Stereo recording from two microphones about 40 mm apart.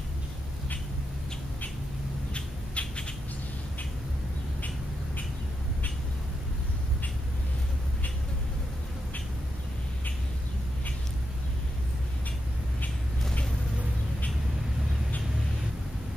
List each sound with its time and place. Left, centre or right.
2.3 s squawk: left